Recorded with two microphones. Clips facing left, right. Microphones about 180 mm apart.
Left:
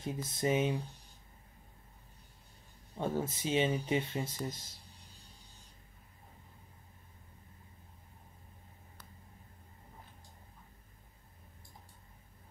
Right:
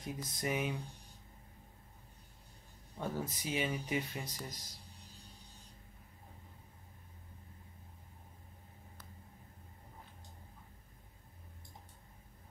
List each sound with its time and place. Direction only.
0.0 s speech: 25° left (ahead or behind)
3.0 s speech: 25° left (ahead or behind)